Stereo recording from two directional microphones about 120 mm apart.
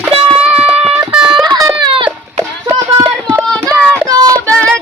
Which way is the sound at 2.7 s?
25° right (ahead or behind).